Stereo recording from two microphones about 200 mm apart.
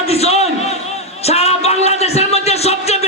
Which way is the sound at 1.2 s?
30° left (ahead or behind).